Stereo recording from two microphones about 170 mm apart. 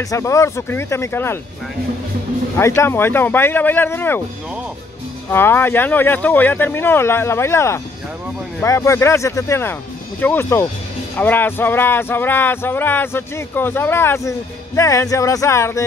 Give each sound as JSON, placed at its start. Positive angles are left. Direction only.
{"t": 0.0, "sound": "music", "side_deg": 20}
{"t": 2.5, "sound": "music", "side_deg": 15}
{"t": 5.3, "sound": "music", "side_deg": 15}